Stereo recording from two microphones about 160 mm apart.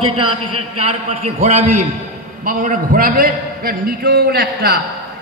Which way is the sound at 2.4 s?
55° right (ahead or behind).